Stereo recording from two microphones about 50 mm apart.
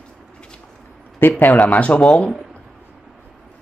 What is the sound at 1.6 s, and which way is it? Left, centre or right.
Speech, left.